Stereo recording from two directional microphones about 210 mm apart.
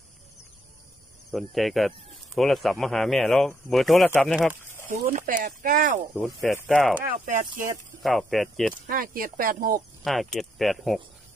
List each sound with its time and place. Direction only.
1.3 s speech: centre (ahead or behind)
4.8 s speech: 40° right (ahead or behind)
6.4 s speech: 5° left (ahead or behind)
7.1 s speech: 40° right (ahead or behind)
8.0 s speech: centre (ahead or behind)
8.8 s speech: 45° right (ahead or behind)
10.0 s speech: centre (ahead or behind)